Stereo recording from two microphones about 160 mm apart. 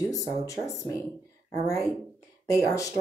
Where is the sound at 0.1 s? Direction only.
20° left (ahead or behind).